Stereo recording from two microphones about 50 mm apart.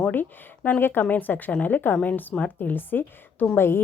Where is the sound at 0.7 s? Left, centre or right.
Left.